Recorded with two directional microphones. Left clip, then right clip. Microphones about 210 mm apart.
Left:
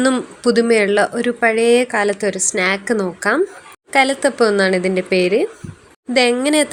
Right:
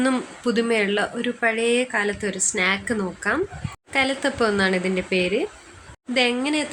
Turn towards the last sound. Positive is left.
turn(degrees=30)  # may be behind; listen again after turning